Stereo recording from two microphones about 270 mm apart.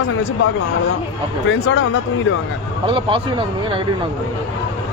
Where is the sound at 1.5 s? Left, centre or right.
Left.